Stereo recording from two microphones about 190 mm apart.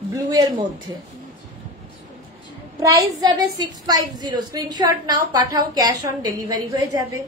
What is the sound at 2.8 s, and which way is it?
A woman's voice, 15° right (ahead or behind).